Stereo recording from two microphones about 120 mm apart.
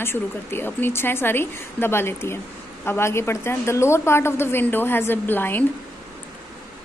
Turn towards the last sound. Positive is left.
turn(degrees=15)  # may be behind; listen again after turning